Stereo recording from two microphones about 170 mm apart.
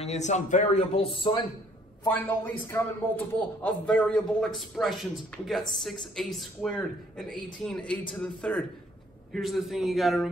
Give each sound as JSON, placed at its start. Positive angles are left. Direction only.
{"t": 0.0, "sound": "speech", "side_deg": 40}
{"t": 2.0, "sound": "a man's voice", "side_deg": 10}